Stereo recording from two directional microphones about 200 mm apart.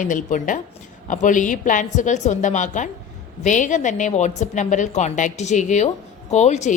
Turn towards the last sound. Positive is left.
turn(degrees=35)  # may be behind; listen again after turning